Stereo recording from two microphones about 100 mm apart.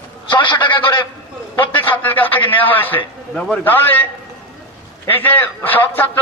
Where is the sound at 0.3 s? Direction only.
50° left (ahead or behind).